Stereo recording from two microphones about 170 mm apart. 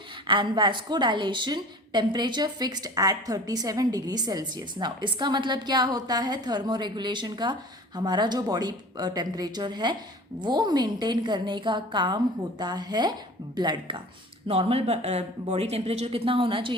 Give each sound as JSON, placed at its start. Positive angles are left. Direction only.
{"t": 0.3, "sound": "a woman's voice", "side_deg": -30}